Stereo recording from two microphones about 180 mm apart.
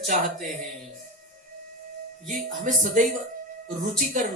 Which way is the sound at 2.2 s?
45° right (ahead or behind).